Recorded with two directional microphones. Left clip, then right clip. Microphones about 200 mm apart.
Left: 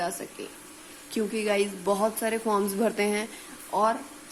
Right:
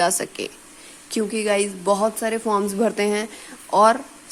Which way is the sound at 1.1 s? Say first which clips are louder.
Right 6 dB; 25° right (ahead or behind).